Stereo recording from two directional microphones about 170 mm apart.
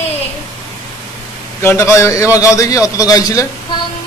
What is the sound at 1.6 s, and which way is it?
A man's voice, 15° left (ahead or behind).